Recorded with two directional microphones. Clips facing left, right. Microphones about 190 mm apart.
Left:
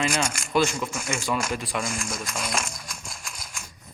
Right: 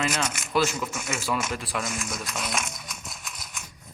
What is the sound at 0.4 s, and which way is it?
Speech, 5° right (ahead or behind).